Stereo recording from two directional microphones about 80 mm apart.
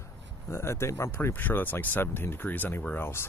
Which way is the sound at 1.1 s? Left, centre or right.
Left.